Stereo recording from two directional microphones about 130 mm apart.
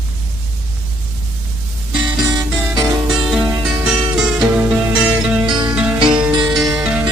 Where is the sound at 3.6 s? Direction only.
5° right (ahead or behind).